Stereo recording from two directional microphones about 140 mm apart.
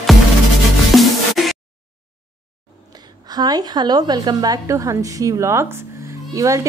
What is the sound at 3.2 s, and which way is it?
A woman's voice, 30° right (ahead or behind).